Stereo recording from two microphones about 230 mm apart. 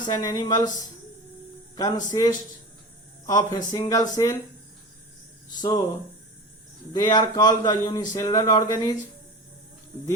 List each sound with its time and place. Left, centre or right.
0.0 s speech: centre
5.5 s speech: centre
6.9 s speech: centre